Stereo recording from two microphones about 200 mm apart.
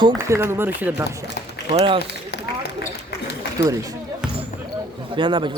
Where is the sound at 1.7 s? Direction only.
30° right (ahead or behind).